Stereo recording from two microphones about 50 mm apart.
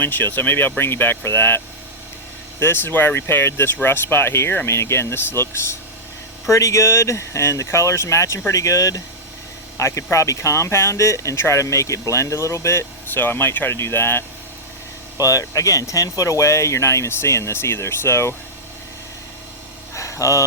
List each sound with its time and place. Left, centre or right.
0.0 s speech: left
6.5 s speech: left
13.1 s speech: left
13.7 s speech: left
15.3 s speech: left
19.9 s a sound: left